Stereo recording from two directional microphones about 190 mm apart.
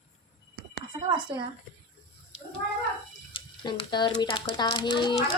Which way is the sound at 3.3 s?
25° left (ahead or behind).